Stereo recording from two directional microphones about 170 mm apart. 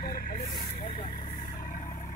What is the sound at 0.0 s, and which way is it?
Vehicle, 60° left (ahead or behind).